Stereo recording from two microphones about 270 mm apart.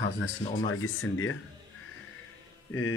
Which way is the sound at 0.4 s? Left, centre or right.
Left.